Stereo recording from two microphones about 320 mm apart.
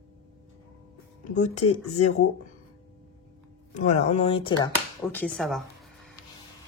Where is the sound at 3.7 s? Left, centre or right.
Left.